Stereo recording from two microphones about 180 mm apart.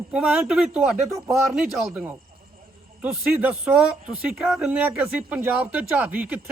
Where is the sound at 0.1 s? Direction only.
5° right (ahead or behind).